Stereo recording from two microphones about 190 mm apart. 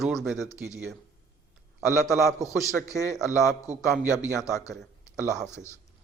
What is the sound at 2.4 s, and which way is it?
A man's voice, 15° left (ahead or behind).